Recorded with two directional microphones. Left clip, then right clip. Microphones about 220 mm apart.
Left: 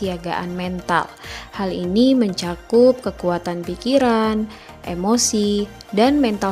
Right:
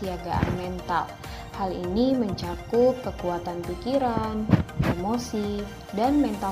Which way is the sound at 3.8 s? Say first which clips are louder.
Left 9 dB; 90° left.